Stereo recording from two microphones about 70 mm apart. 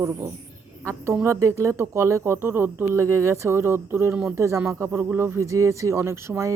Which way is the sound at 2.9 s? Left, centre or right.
Right.